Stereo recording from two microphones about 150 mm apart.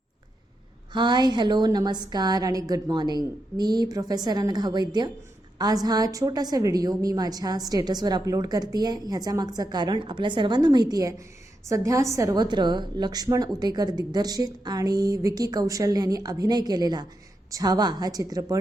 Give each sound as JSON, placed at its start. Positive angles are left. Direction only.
{"t": 0.9, "sound": "a woman's voice", "side_deg": -30}